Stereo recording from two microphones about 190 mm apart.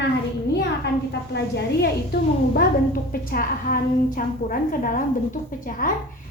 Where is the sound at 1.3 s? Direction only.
60° left (ahead or behind).